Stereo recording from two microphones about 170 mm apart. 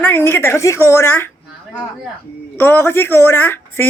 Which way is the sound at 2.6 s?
10° left (ahead or behind).